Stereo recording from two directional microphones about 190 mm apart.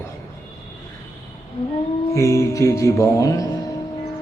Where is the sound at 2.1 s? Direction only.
15° left (ahead or behind).